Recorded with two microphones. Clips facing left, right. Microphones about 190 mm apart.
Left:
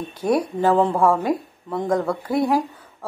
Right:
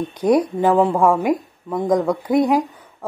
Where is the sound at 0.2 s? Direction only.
15° right (ahead or behind).